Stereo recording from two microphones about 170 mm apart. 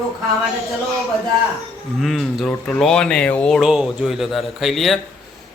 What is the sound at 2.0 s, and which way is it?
A man's voice, centre (ahead or behind).